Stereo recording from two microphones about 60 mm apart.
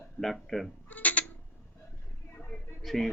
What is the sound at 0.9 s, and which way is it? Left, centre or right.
Bleat, left.